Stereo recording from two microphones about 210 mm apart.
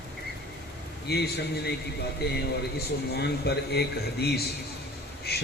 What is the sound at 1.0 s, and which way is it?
A man's voice, 50° left (ahead or behind).